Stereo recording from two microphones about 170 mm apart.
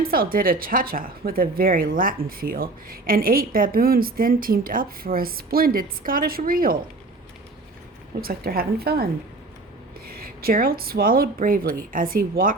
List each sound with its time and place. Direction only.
0.0 s speech: 60° right (ahead or behind)
8.2 s speech: 60° right (ahead or behind)
10.1 s speech: 60° right (ahead or behind)